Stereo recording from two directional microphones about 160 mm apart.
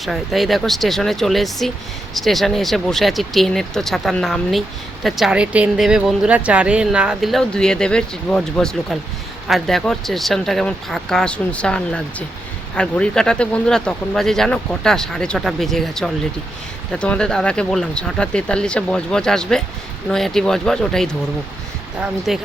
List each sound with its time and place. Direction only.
0.0 s speech: centre (ahead or behind)
22.3 s speech: centre (ahead or behind)